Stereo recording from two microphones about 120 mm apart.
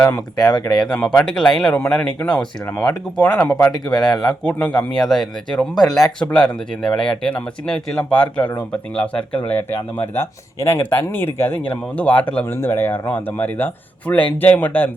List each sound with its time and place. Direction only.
0.0 s speech: 15° left (ahead or behind)
3.8 s speech: 5° left (ahead or behind)